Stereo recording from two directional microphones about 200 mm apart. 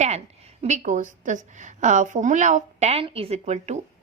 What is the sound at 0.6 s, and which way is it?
A woman's voice, 35° right (ahead or behind).